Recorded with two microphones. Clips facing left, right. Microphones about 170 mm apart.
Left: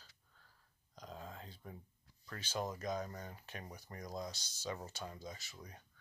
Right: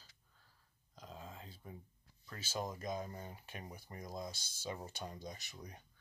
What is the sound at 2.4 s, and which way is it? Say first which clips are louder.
Speech: left 1 dB; 10° right (ahead or behind).